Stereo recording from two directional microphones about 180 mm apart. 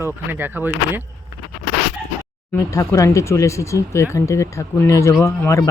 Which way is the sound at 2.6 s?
15° left (ahead or behind).